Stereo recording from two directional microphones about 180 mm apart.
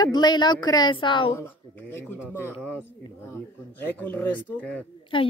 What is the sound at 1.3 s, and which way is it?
Speech, 10° left (ahead or behind).